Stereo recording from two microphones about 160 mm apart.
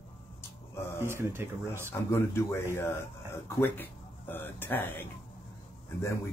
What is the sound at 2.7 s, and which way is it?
Speech, 15° left (ahead or behind).